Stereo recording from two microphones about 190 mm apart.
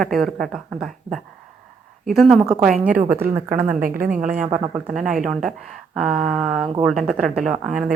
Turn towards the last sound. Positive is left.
turn(degrees=-5)  # may be behind; listen again after turning